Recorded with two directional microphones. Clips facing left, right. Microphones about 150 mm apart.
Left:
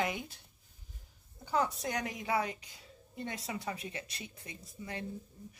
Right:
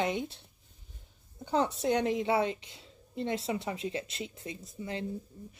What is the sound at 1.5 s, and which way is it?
A woman's voice, 25° right (ahead or behind).